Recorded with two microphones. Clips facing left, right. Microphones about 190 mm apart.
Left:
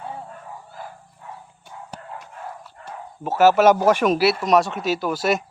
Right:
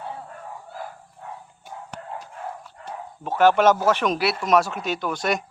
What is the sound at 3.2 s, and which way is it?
Speech, 5° left (ahead or behind).